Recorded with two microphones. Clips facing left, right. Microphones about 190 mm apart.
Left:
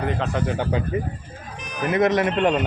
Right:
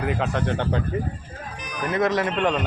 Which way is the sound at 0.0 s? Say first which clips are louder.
Even; 5° right (ahead or behind).